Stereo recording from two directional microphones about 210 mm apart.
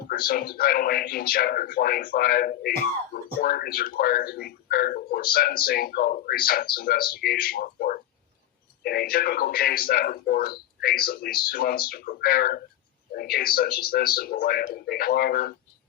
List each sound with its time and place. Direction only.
0.1 s speech: 45° left (ahead or behind)